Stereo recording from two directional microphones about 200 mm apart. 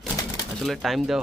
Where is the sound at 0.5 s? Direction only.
Centre (ahead or behind).